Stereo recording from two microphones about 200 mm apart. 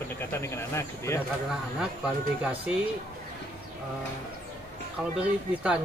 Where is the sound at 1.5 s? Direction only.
5° right (ahead or behind).